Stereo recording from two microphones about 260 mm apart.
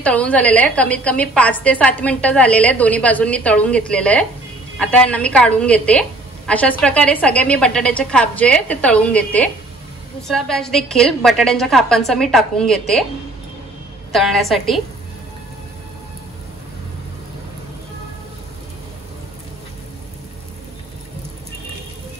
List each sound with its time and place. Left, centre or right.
0.0 s a woman's voice: centre
14.1 s a woman's voice: centre